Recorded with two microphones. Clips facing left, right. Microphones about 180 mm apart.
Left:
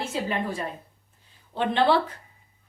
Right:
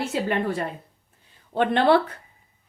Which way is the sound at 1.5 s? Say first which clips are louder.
Right 3 dB; 55° right (ahead or behind).